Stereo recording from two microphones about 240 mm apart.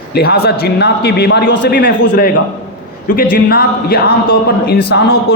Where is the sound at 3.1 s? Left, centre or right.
Left.